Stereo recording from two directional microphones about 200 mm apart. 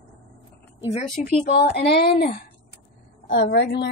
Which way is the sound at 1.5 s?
50° left (ahead or behind).